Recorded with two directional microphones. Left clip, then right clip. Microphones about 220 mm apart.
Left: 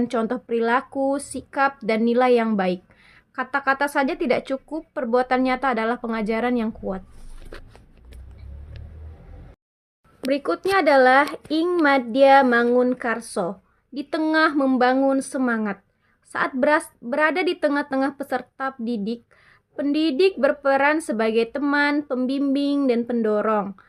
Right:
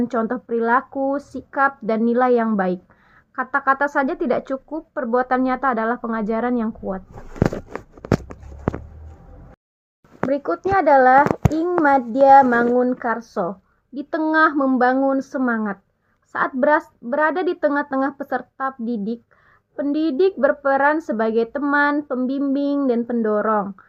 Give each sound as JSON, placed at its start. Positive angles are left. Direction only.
{"t": 0.1, "sound": "a woman's voice", "side_deg": 30}
{"t": 10.4, "sound": "a woman's voice", "side_deg": 35}